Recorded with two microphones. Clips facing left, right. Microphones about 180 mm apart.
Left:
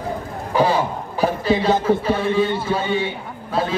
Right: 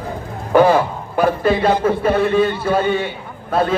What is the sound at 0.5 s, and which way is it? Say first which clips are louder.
A man's voice: right 6 dB; 60° right (ahead or behind).